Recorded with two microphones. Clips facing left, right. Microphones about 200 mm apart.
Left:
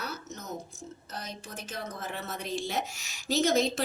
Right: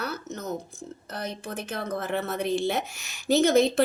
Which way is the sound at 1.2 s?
60° right (ahead or behind).